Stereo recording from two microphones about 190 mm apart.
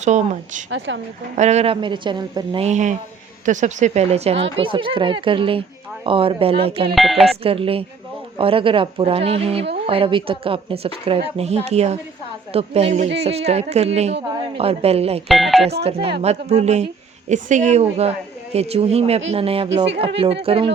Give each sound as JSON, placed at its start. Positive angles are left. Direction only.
{"t": 0.0, "sound": "speech", "side_deg": -40}
{"t": 0.7, "sound": "speech", "side_deg": -70}
{"t": 1.4, "sound": "speech", "side_deg": -35}
{"t": 2.6, "sound": "speech", "side_deg": -40}
{"t": 6.9, "sound": "speech", "side_deg": 0}
{"t": 7.4, "sound": "speech", "side_deg": -30}
{"t": 15.3, "sound": "speech", "side_deg": 0}
{"t": 15.8, "sound": "speech", "side_deg": -30}